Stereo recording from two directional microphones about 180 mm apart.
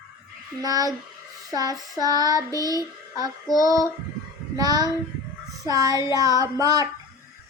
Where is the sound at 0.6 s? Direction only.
20° right (ahead or behind).